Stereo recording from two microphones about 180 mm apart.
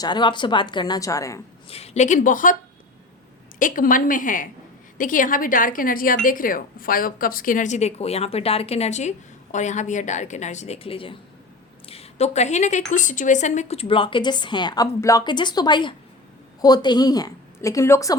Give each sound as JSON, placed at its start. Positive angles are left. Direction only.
{"t": 0.0, "sound": "a woman's voice", "side_deg": 25}
{"t": 1.7, "sound": "speech", "side_deg": 35}
{"t": 3.6, "sound": "a woman's voice", "side_deg": 50}